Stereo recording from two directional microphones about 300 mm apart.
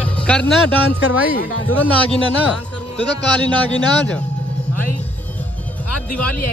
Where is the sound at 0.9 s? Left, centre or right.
Left.